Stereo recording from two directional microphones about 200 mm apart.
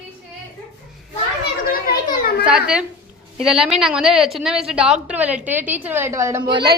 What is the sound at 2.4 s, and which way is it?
A woman's voice, 5° right (ahead or behind).